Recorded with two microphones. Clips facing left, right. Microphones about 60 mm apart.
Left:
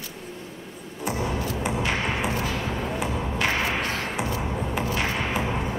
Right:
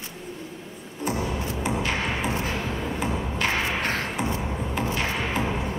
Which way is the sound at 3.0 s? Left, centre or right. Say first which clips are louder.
Even; centre.